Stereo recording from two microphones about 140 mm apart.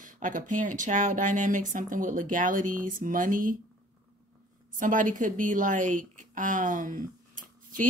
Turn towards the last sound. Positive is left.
turn(degrees=-70)  # may be behind; listen again after turning